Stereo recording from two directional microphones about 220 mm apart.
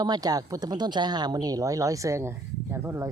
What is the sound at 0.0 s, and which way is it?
Speech, 20° right (ahead or behind).